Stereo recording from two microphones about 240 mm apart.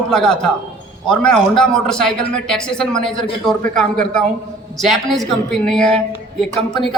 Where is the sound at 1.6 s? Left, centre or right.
Centre.